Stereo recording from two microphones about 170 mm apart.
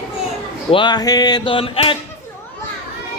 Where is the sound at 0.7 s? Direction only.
30° left (ahead or behind).